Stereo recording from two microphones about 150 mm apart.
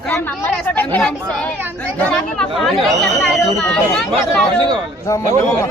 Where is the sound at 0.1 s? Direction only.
10° left (ahead or behind).